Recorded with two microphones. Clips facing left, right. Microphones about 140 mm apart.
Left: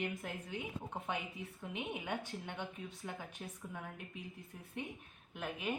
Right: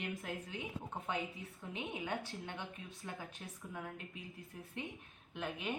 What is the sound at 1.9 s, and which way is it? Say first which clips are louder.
Speech: even; 20° left (ahead or behind).